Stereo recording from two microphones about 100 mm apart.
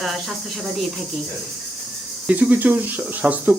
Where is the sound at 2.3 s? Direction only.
15° right (ahead or behind).